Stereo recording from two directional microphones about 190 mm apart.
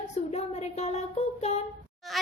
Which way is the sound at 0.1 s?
35° left (ahead or behind).